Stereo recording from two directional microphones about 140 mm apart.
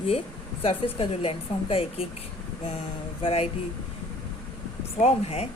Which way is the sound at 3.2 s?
45° left (ahead or behind).